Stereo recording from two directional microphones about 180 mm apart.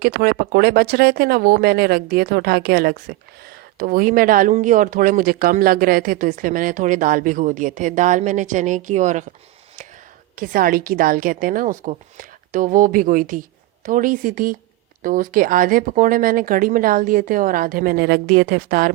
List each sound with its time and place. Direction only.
0.0 s speech: 55° right (ahead or behind)
10.3 s speech: 50° right (ahead or behind)